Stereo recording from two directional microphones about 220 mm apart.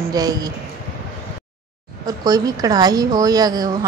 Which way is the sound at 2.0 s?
15° right (ahead or behind).